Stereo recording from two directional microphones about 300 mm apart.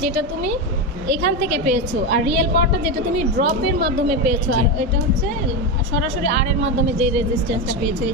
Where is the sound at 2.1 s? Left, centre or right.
Right.